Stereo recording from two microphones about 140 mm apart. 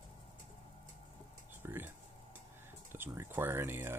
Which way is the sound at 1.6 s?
15° right (ahead or behind).